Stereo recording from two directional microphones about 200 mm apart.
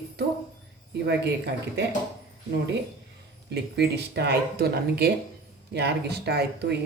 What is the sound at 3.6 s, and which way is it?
Speech, 55° right (ahead or behind).